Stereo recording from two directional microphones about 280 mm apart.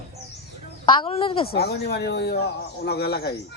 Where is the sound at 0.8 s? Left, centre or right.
Centre.